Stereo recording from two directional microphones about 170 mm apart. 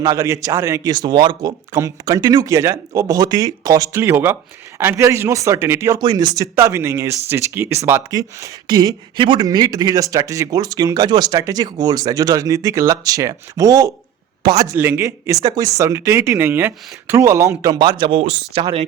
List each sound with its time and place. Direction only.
0.0 s speech: 20° right (ahead or behind)